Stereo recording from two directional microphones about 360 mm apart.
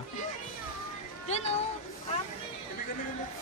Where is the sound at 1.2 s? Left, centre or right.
Centre.